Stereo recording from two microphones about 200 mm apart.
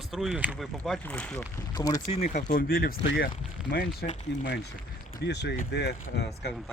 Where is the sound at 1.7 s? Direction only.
20° left (ahead or behind).